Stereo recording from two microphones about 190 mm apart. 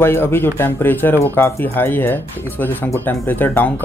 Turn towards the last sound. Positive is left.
turn(degrees=10)  # may be behind; listen again after turning